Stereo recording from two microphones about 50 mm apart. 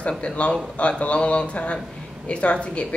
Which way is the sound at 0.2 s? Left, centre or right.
Left.